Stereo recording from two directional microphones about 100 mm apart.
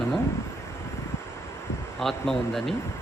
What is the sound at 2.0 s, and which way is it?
Speech, centre (ahead or behind).